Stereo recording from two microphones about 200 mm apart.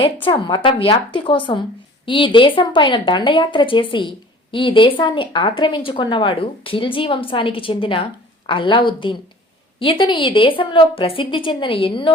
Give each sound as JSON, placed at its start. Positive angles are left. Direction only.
{"t": 0.0, "sound": "speech", "side_deg": 25}